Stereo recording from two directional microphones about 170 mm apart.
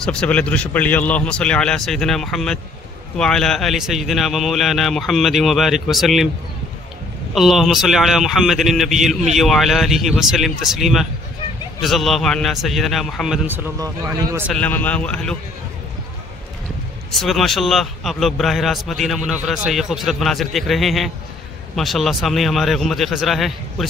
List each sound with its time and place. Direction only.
0.0 s a man's voice: 5° left (ahead or behind)
7.3 s a man's voice: centre (ahead or behind)
13.5 s speech: 20° right (ahead or behind)
14.5 s a man's voice: 10° left (ahead or behind)
17.1 s a man's voice: centre (ahead or behind)